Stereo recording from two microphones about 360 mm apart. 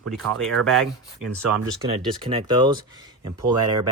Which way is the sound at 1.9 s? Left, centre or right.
Centre.